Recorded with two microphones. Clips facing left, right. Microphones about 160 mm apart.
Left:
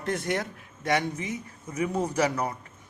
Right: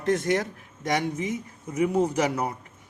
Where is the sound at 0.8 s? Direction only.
20° right (ahead or behind).